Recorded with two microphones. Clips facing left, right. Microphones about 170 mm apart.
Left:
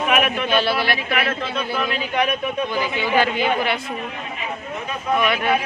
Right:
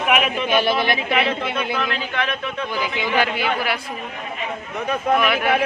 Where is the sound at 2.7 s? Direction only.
10° right (ahead or behind).